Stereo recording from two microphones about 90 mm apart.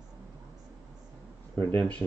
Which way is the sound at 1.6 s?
20° left (ahead or behind).